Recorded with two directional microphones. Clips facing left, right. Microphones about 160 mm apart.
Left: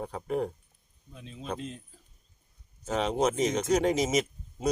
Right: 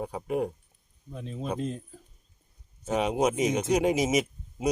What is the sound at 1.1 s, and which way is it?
Speech, 45° right (ahead or behind).